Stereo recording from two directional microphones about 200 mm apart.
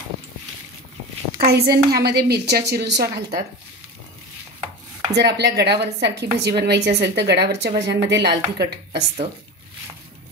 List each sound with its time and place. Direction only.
1.4 s speech: 50° right (ahead or behind)
5.1 s speech: 55° right (ahead or behind)